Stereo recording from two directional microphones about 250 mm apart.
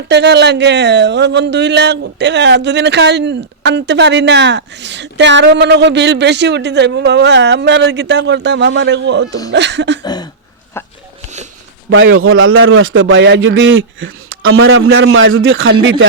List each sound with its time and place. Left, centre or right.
0.1 s speech: right
10.0 s a sound: centre
11.9 s speech: right